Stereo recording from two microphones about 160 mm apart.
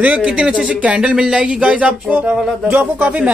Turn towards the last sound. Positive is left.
turn(degrees=-10)  # may be behind; listen again after turning